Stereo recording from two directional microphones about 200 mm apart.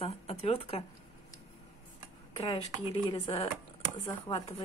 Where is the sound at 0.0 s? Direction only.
30° left (ahead or behind).